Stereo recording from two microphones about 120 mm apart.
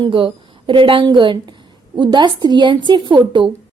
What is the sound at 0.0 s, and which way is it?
A woman's voice, 45° right (ahead or behind).